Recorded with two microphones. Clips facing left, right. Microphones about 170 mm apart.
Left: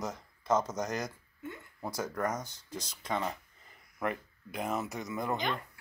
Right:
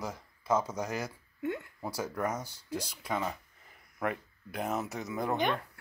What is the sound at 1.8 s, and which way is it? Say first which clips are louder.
Speech: even; 10° right (ahead or behind).